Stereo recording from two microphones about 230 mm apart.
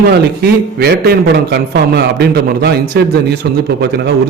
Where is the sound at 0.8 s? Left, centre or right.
Right.